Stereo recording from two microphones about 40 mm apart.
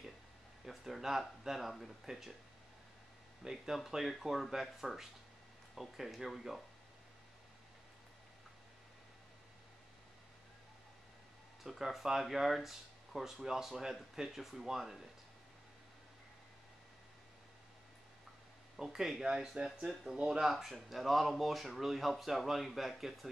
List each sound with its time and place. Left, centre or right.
0.7 s speech: centre
3.4 s speech: centre
11.6 s speech: centre
18.8 s speech: centre